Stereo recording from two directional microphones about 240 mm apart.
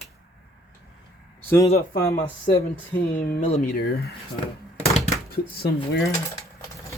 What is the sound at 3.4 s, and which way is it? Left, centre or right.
Speech, left.